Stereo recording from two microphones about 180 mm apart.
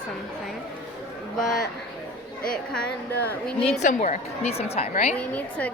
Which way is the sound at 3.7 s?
40° left (ahead or behind).